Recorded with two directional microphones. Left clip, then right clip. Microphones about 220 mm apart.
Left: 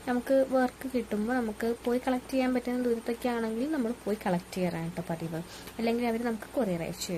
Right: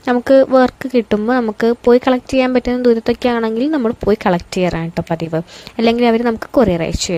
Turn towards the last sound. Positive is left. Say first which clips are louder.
# right 17 dB
turn(degrees=-45)  # may be behind; listen again after turning